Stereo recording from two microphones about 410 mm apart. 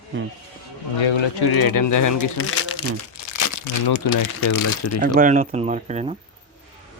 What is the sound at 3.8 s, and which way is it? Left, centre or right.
Speech, left.